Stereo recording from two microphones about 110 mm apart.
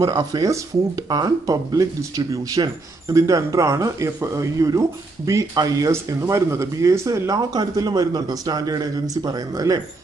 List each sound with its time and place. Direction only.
0.0 s speech: 35° right (ahead or behind)